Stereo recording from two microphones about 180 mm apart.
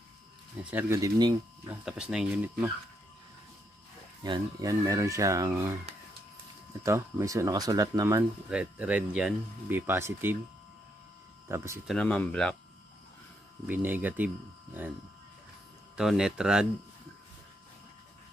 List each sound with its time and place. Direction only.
0.7 s speech: 10° right (ahead or behind)
1.9 s speech: 5° right (ahead or behind)
4.2 s speech: 20° right (ahead or behind)
6.8 s speech: 15° right (ahead or behind)
8.5 s speech: 5° right (ahead or behind)
11.4 s speech: 15° right (ahead or behind)
11.9 s speech: 5° left (ahead or behind)
13.7 s speech: 10° right (ahead or behind)
16.0 s speech: 5° right (ahead or behind)